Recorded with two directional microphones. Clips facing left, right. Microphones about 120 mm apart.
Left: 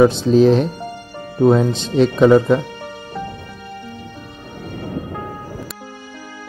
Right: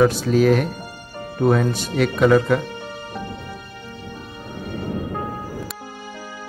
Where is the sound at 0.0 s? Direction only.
25° left (ahead or behind).